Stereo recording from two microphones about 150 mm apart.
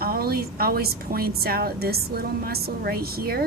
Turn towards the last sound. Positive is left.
turn(degrees=-90)